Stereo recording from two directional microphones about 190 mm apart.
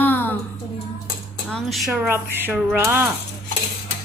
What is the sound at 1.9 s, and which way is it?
Speech, 10° right (ahead or behind).